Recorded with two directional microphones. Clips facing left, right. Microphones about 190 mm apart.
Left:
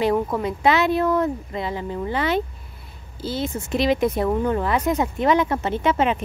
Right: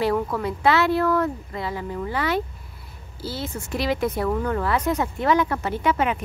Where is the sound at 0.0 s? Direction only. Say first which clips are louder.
Left 2 dB; 20° left (ahead or behind).